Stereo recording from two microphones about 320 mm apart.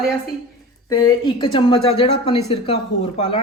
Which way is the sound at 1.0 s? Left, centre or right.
Centre.